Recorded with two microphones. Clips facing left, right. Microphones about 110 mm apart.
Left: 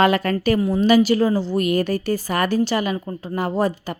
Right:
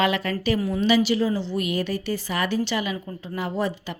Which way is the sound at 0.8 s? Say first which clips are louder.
Left 5 dB; 45° left (ahead or behind).